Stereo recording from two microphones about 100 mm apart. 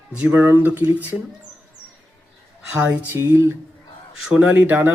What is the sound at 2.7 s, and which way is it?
Speech, 20° right (ahead or behind).